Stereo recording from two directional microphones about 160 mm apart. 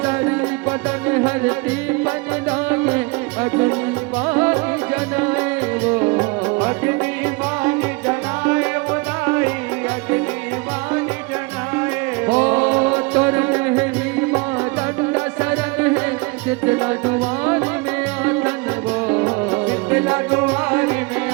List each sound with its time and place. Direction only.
0.0 s music: 10° right (ahead or behind)
12.2 s music: 10° right (ahead or behind)
19.0 s music: 10° right (ahead or behind)